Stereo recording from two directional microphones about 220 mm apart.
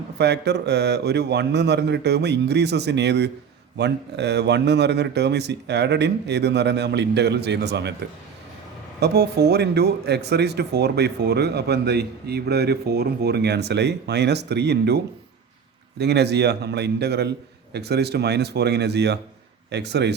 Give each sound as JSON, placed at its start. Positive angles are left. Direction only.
{"t": 0.2, "sound": "speech", "side_deg": -50}
{"t": 9.0, "sound": "speech", "side_deg": -50}